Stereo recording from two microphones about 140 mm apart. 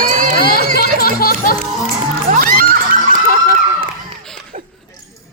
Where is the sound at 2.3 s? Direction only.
80° right.